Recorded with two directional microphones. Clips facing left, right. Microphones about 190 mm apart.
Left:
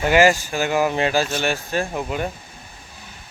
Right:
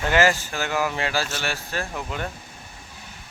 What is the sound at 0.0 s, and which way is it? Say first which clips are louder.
Speech: left 5 dB; 15° left (ahead or behind).